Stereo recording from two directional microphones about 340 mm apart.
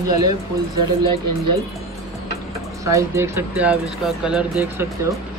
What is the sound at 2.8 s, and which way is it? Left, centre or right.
Speech, centre.